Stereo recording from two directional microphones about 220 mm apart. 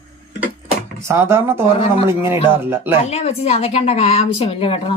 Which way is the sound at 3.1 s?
30° left (ahead or behind).